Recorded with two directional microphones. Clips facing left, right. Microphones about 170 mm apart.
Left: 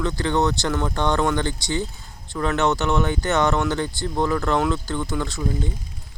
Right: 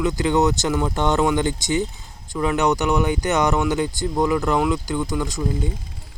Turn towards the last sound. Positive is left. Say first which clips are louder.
# right 2 dB
turn(degrees=-15)  # may be behind; listen again after turning